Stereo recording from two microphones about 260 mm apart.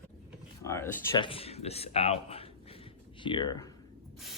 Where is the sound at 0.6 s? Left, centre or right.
Centre.